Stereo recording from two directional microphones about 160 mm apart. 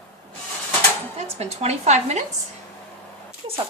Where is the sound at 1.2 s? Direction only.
40° right (ahead or behind).